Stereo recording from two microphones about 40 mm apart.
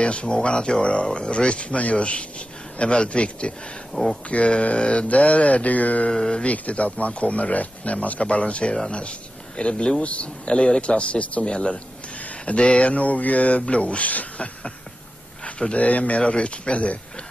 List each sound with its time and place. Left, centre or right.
0.0 s speech: left
6.0 s speech: left
6.4 s speech: left